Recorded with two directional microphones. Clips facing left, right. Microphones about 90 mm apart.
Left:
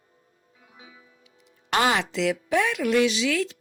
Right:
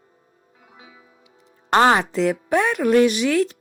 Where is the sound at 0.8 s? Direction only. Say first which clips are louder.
Right 2 dB; 55° right (ahead or behind).